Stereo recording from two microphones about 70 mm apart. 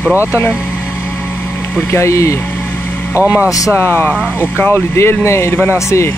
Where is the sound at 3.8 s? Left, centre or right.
Left.